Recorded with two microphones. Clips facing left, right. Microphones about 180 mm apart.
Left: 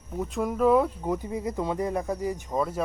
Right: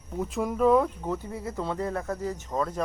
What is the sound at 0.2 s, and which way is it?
Speech, centre (ahead or behind).